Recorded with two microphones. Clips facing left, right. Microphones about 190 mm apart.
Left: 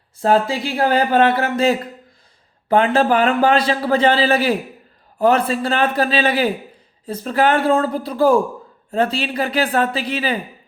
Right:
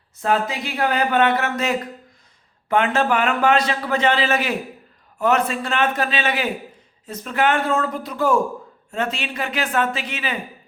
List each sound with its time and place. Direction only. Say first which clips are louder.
0.2 s a man's voice: left 5 dB; 30° left (ahead or behind)